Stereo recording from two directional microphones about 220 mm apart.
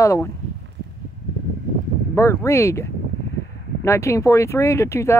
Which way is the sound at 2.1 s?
15° left (ahead or behind).